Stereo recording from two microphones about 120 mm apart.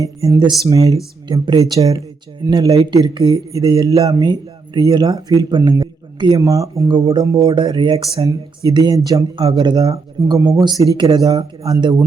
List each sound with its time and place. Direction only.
0.0 s speech: 30° right (ahead or behind)
5.8 s a sound: 40° right (ahead or behind)
6.4 s speech: 25° right (ahead or behind)
9.3 s speech: 45° right (ahead or behind); by 10.6 s 25° right (ahead or behind)
10.6 s speech: 40° right (ahead or behind)
11.2 s speech: 30° right (ahead or behind)